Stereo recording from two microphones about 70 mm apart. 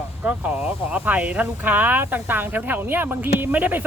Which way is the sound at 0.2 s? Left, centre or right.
Centre.